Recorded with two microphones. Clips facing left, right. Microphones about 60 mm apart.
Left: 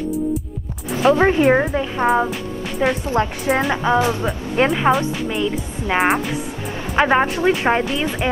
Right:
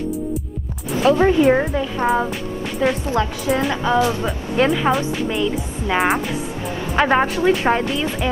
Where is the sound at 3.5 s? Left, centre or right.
Left.